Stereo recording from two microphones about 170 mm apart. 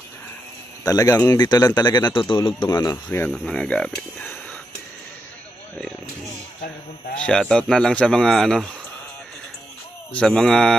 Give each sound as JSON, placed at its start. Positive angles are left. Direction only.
{"t": 0.8, "sound": "speech", "side_deg": 20}
{"t": 3.3, "sound": "speech", "side_deg": 5}
{"t": 7.2, "sound": "speech", "side_deg": 5}
{"t": 10.1, "sound": "speech", "side_deg": 5}